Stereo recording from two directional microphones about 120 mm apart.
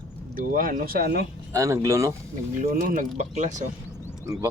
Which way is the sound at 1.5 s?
25° right (ahead or behind).